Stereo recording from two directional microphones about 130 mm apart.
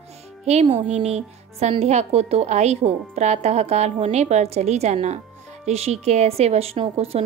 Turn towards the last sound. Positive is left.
turn(degrees=-50)  # may be behind; listen again after turning